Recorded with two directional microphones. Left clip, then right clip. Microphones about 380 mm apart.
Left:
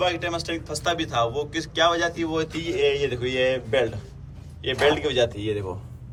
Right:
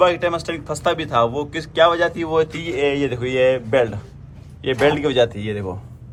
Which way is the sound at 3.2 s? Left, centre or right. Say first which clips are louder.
Right 6 dB; left.